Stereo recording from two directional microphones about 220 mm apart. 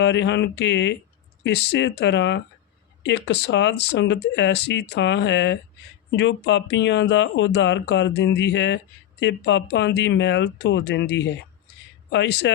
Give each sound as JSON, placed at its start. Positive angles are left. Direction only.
{"t": 0.0, "sound": "speech", "side_deg": 55}